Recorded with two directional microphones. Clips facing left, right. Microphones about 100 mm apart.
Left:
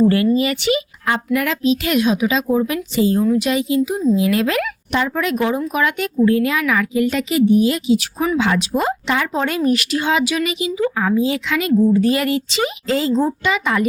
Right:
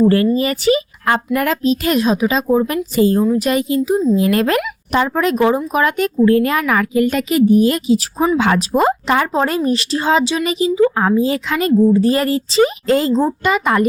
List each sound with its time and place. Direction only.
0.0 s speech: 35° right (ahead or behind)